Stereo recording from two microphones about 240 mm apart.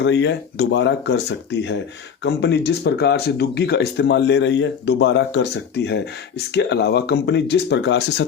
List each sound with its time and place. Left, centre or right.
0.0 s speech: left